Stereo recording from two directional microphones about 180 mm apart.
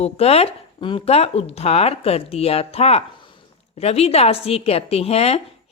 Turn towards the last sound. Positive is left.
turn(degrees=35)  # may be behind; listen again after turning